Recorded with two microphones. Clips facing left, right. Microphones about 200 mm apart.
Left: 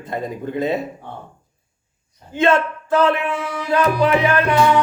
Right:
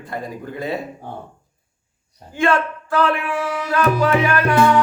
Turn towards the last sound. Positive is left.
turn(degrees=20)  # may be behind; listen again after turning